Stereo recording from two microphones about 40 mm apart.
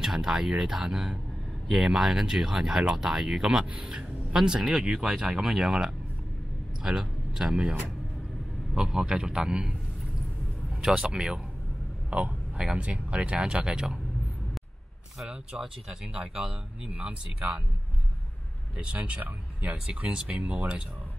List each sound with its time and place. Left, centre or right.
0.0 s speech: centre
5.1 s speech: centre
6.8 s a sound: centre
8.8 s speech: centre
10.8 s speech: centre
12.1 s speech: right
15.2 s speech: centre
18.8 s speech: right